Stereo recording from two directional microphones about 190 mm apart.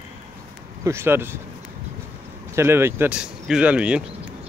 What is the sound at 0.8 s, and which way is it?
Speech, 10° right (ahead or behind).